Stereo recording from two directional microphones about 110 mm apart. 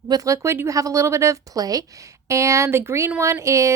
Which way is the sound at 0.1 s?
30° right (ahead or behind).